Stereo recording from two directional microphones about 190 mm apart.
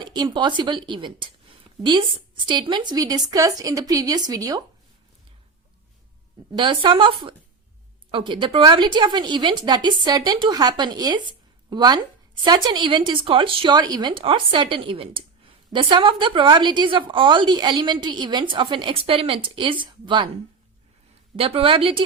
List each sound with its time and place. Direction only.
0.0 s speech: 25° right (ahead or behind)
6.6 s speech: 25° right (ahead or behind)
21.3 s speech: 30° right (ahead or behind)